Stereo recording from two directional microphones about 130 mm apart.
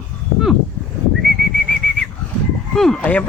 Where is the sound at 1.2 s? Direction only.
5° left (ahead or behind).